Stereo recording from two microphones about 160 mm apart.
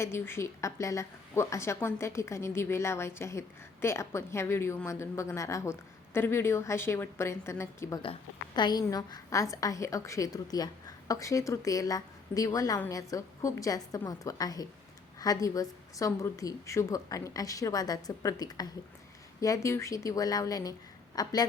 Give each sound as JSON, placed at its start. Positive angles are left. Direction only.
{"t": 0.0, "sound": "a woman's voice", "side_deg": 15}